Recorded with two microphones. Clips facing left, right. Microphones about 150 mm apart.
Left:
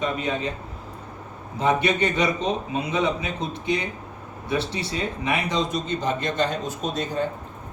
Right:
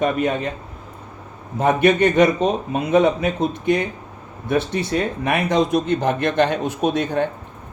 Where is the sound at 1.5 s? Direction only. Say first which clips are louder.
Right 6 dB; 55° right (ahead or behind).